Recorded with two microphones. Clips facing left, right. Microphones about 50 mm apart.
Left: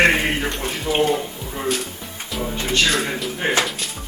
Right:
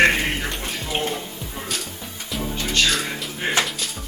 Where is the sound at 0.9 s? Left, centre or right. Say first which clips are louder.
Left 8 dB; left.